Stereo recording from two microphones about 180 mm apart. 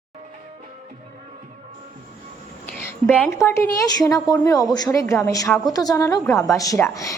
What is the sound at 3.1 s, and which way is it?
A woman's voice, 10° left (ahead or behind).